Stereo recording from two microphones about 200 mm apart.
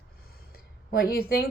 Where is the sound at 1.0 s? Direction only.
50° left (ahead or behind).